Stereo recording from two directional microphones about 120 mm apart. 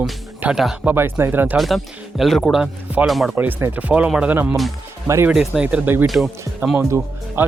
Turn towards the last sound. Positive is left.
turn(degrees=-20)  # may be behind; listen again after turning